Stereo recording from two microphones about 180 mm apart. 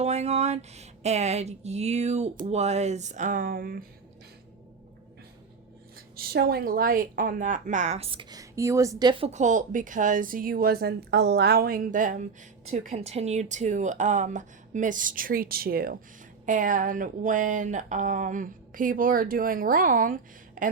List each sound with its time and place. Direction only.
0.0 s speech: 35° right (ahead or behind); by 3.8 s 55° right (ahead or behind)
6.1 s a woman's voice: 60° right (ahead or behind)